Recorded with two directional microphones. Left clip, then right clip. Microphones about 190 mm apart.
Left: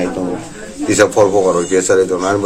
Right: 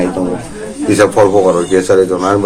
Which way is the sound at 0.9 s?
20° left (ahead or behind).